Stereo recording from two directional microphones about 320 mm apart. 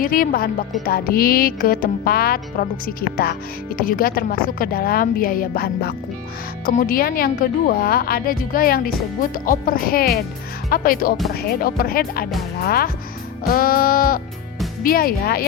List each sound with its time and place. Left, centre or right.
0.0 s music: left